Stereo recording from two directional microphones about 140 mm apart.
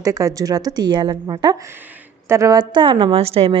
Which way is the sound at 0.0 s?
25° right (ahead or behind).